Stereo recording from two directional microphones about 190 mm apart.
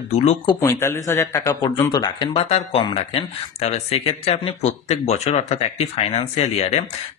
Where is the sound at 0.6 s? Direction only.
15° left (ahead or behind).